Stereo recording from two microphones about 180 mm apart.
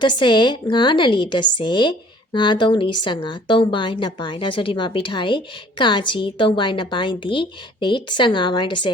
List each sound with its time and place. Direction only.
0.0 s a woman's voice: 25° left (ahead or behind)